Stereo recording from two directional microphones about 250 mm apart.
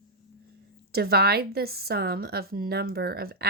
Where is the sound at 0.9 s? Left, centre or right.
Right.